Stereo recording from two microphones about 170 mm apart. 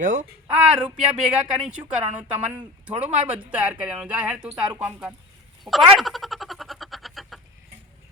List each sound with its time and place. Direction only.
0.0 s speech: 45° right (ahead or behind)
0.5 s speech: 5° right (ahead or behind)
5.6 s frog: centre (ahead or behind)